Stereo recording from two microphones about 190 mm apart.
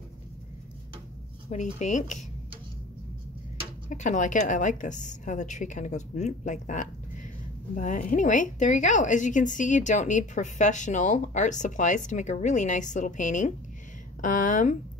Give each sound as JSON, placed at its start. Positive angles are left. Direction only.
{"t": 1.5, "sound": "a woman's voice", "side_deg": 40}
{"t": 3.9, "sound": "a woman's voice", "side_deg": 40}